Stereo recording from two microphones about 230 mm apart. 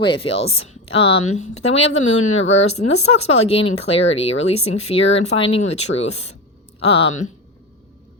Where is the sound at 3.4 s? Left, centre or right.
Left.